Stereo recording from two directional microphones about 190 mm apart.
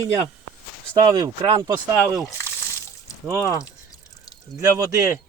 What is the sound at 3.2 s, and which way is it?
Speech, 15° right (ahead or behind).